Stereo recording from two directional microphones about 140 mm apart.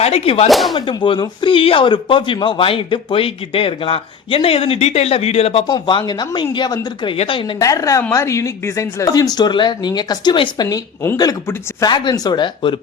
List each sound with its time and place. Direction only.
0.0 s speech: 45° left (ahead or behind)
0.4 s speech: centre (ahead or behind)
0.7 s speech: 30° left (ahead or behind)
5.7 s speech: 35° left (ahead or behind)
7.6 s speech: 25° left (ahead or behind)